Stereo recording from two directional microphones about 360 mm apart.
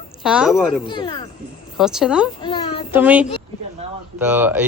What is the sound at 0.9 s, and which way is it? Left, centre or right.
Speech, centre.